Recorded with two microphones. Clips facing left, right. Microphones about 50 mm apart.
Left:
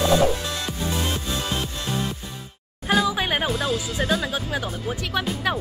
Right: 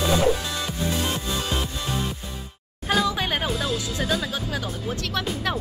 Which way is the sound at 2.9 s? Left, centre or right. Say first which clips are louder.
Left 2 dB; centre.